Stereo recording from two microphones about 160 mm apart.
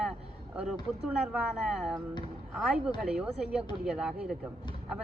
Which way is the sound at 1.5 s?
Centre (ahead or behind).